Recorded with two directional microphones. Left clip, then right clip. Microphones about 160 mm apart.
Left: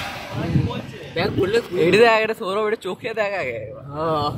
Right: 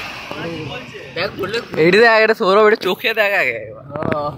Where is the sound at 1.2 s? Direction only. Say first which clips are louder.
Left 2 dB; 90° left.